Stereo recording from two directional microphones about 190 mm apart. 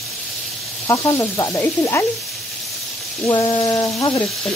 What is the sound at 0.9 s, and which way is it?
Frying, 15° left (ahead or behind).